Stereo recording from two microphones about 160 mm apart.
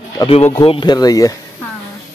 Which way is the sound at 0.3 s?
40° left (ahead or behind).